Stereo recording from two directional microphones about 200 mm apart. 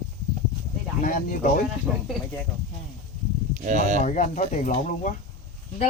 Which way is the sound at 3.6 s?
40° right (ahead or behind).